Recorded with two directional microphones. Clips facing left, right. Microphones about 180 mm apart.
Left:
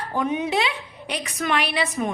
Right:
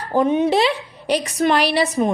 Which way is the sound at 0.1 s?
35° right (ahead or behind).